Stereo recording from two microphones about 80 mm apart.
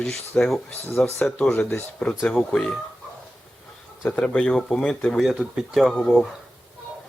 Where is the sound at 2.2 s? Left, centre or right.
Centre.